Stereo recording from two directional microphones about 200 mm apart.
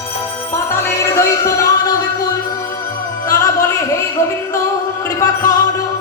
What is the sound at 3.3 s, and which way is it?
Music, 15° left (ahead or behind).